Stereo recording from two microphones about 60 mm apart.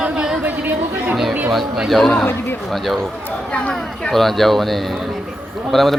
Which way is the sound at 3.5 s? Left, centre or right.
Centre.